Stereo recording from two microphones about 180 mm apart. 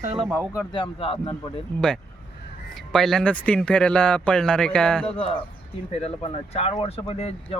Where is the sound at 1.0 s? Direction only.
30° left (ahead or behind).